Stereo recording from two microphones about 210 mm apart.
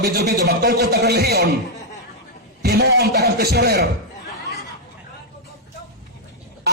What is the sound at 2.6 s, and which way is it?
A man's voice, 50° right (ahead or behind).